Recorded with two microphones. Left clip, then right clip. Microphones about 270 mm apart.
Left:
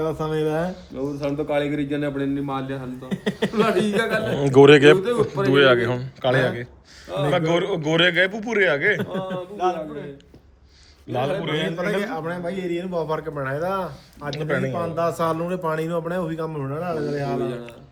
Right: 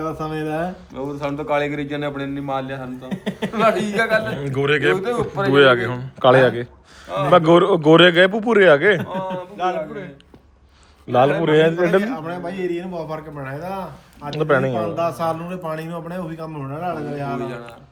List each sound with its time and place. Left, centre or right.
0.0 s a man's voice: centre
1.4 s a man's voice: centre
5.0 s a man's voice: centre
9.6 s a sound: right
11.1 s speech: centre
12.0 s a man's voice: centre
14.3 s speech: centre
14.8 s a man's voice: centre